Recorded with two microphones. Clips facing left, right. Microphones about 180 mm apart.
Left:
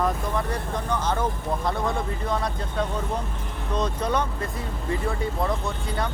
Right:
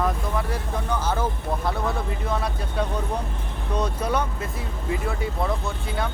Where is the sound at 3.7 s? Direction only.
10° right (ahead or behind).